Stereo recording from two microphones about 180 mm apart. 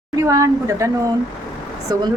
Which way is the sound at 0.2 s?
20° right (ahead or behind).